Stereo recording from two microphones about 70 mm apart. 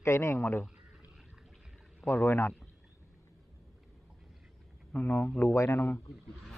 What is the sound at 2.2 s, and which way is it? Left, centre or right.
Speech, left.